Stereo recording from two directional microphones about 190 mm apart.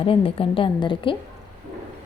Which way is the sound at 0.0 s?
30° left (ahead or behind).